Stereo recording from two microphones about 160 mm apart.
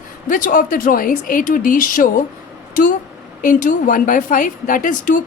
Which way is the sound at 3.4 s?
55° left (ahead or behind).